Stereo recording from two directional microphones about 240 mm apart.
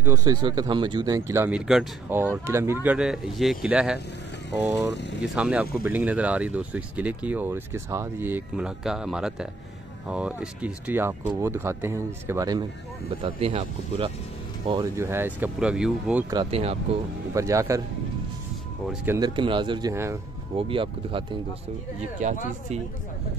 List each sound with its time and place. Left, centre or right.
0.0 s speech: centre
5.2 s speech: centre
16.3 s speech: right
17.3 s speech: centre
19.1 s speech: centre
20.5 s speech: right
22.2 s speech: right